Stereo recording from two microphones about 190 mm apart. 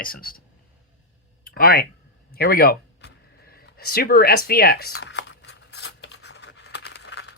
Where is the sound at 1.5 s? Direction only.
50° left (ahead or behind).